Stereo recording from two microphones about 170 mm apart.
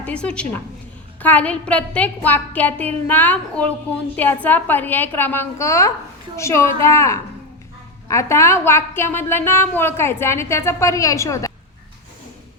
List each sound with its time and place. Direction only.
0.0 s a woman's voice: 5° left (ahead or behind)